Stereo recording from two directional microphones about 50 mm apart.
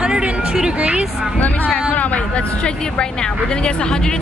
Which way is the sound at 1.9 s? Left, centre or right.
Left.